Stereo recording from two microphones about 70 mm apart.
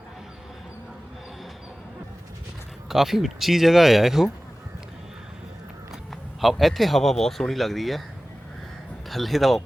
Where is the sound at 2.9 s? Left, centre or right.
Centre.